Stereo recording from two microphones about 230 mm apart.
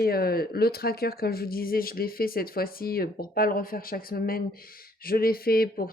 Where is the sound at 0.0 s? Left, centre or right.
Left.